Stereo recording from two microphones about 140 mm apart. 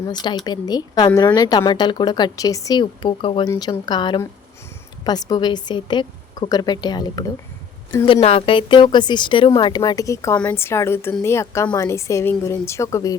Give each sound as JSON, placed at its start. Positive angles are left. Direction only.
{"t": 0.0, "sound": "speech", "side_deg": 30}
{"t": 8.0, "sound": "a woman's voice", "side_deg": 40}